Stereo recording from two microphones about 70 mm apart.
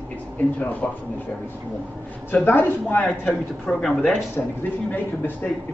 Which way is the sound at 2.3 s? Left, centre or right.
Left.